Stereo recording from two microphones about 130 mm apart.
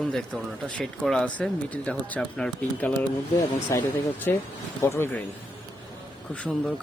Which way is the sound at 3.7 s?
25° left (ahead or behind).